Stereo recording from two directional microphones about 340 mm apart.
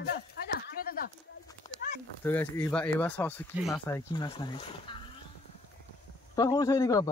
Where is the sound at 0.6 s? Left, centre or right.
Left.